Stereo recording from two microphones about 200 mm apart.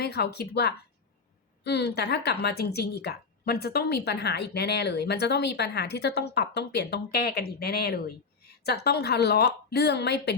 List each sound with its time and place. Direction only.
0.0 s a woman's voice: 55° left (ahead or behind)